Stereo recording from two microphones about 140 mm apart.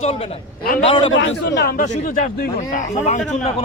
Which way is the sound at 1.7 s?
90° left.